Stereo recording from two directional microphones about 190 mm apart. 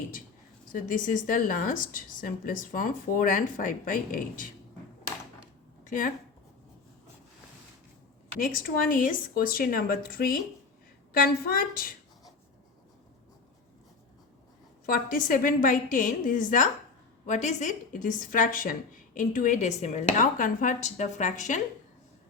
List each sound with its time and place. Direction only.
0.7 s a woman's voice: 45° left (ahead or behind)
8.4 s a woman's voice: 45° left (ahead or behind)
11.4 s a woman's voice: 50° left (ahead or behind)
14.8 s a woman's voice: 50° left (ahead or behind)